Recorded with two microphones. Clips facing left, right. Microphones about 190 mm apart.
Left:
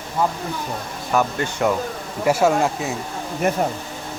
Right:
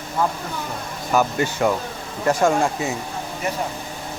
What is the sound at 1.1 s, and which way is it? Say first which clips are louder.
Speech: right 1 dB; 5° right (ahead or behind).